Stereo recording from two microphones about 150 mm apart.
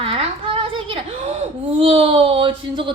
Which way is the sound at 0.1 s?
40° right (ahead or behind).